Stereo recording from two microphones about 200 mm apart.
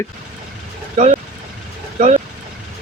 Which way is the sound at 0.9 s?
35° right (ahead or behind).